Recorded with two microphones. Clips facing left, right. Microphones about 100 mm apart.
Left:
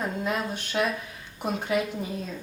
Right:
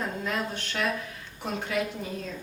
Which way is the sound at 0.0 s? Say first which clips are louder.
Left 2 dB; 15° left (ahead or behind).